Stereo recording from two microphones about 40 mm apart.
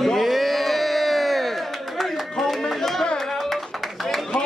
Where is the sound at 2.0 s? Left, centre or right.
Centre.